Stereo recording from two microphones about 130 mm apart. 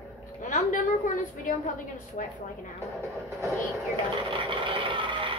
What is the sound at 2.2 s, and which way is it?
Speech, 70° left (ahead or behind).